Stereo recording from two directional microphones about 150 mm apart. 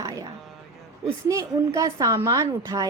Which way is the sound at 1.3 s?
20° right (ahead or behind).